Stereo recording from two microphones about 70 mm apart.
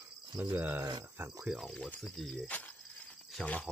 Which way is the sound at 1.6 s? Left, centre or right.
Centre.